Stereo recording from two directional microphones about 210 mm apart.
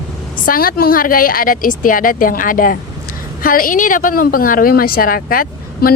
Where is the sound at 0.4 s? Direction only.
45° left (ahead or behind).